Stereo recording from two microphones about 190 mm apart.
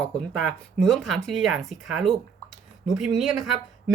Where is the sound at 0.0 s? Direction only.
5° left (ahead or behind).